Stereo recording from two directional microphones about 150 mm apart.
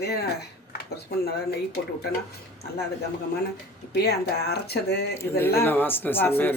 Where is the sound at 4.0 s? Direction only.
90° left.